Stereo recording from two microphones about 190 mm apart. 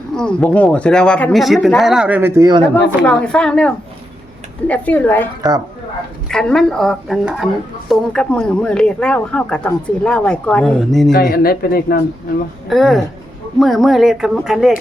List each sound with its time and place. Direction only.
0.2 s speech: 5° left (ahead or behind); by 2.6 s 20° right (ahead or behind)
2.7 s a woman's voice: 5° left (ahead or behind)
5.4 s speech: 20° right (ahead or behind)
6.2 s speech: 5° left (ahead or behind)
11.1 s speech: 50° left (ahead or behind)
12.6 s speech: centre (ahead or behind)